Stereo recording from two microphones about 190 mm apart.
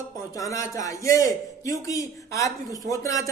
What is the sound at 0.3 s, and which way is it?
A man's voice, 15° left (ahead or behind).